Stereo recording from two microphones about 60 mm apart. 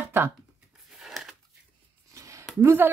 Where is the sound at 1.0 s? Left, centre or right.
Centre.